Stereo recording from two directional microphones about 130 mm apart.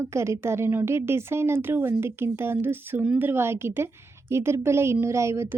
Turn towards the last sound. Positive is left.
turn(degrees=-20)  # may be behind; listen again after turning